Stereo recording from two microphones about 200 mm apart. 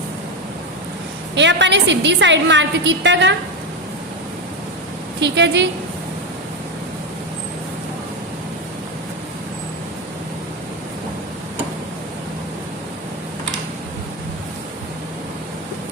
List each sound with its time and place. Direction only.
1.4 s a woman's voice: 65° right (ahead or behind)
5.2 s a woman's voice: 60° right (ahead or behind)